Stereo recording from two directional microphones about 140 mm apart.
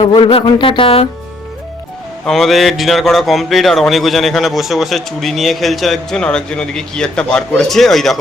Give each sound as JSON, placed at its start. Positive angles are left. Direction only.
{"t": 0.0, "sound": "music", "side_deg": 40}
{"t": 2.2, "sound": "speech", "side_deg": 0}